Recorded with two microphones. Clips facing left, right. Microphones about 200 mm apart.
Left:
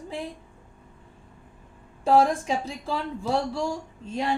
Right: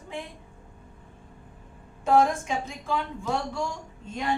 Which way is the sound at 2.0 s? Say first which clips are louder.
Left 1 dB; 35° left (ahead or behind).